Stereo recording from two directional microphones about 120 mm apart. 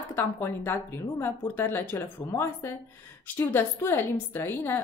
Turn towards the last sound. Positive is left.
turn(degrees=20)  # may be behind; listen again after turning